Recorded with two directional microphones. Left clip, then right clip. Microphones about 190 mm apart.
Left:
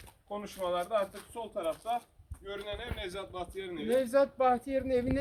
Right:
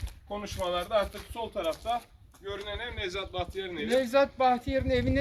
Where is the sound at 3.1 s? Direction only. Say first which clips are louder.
Right 5 dB; 65° left (ahead or behind).